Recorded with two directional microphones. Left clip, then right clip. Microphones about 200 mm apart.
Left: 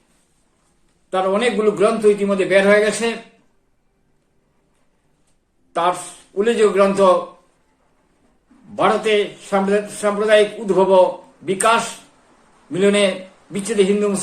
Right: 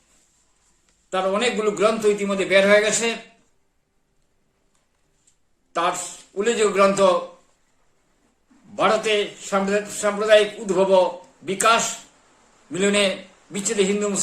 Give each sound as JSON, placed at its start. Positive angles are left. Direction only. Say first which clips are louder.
{"t": 1.1, "sound": "a man's voice", "louder": "left 4 dB", "side_deg": -10}
{"t": 5.7, "sound": "a man's voice", "louder": "left 4 dB", "side_deg": -10}
{"t": 8.7, "sound": "a man's voice", "louder": "left 3 dB", "side_deg": -10}